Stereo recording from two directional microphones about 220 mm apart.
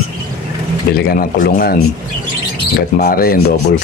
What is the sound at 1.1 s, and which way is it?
Speech, 40° left (ahead or behind).